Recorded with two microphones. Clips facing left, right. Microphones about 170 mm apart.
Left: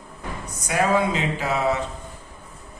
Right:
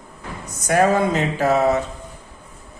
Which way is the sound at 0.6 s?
50° right (ahead or behind).